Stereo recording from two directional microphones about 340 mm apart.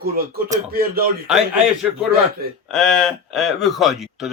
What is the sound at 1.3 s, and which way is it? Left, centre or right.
Speech, centre.